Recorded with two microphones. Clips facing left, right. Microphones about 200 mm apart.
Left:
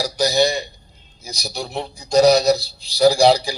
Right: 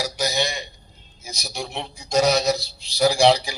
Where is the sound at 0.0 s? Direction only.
35° left (ahead or behind).